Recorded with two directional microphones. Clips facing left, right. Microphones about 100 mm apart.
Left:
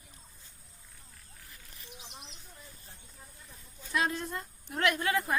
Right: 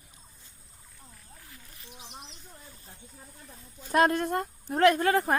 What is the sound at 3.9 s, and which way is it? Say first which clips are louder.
Speech: right 8 dB; 55° right (ahead or behind).